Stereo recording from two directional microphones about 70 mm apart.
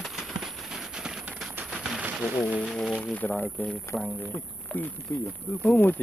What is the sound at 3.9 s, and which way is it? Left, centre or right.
Speech, left.